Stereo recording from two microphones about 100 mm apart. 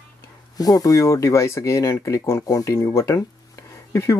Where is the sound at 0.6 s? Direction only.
40° left (ahead or behind).